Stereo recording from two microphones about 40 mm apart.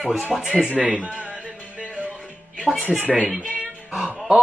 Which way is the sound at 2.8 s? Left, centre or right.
Right.